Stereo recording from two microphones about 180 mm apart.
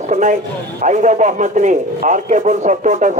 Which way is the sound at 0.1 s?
45° right (ahead or behind).